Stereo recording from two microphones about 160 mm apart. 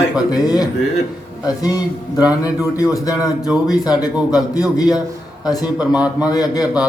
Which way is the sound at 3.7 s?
25° left (ahead or behind).